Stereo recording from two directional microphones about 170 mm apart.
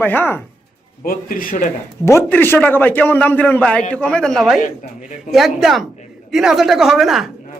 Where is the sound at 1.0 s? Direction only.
55° left (ahead or behind).